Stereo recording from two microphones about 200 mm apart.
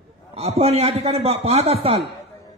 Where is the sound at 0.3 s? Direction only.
30° right (ahead or behind).